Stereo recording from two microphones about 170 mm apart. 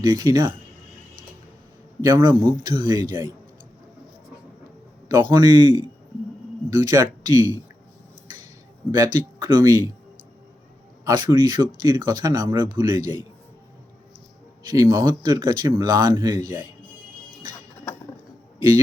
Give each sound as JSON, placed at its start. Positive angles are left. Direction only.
{"t": 0.0, "sound": "speech", "side_deg": -25}
{"t": 2.0, "sound": "speech", "side_deg": -20}
{"t": 5.0, "sound": "speech", "side_deg": -20}
{"t": 9.4, "sound": "speech", "side_deg": -20}
{"t": 11.0, "sound": "speech", "side_deg": -25}
{"t": 14.7, "sound": "speech", "side_deg": -20}